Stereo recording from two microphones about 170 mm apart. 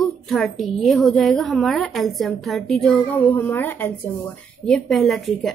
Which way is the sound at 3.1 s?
15° left (ahead or behind).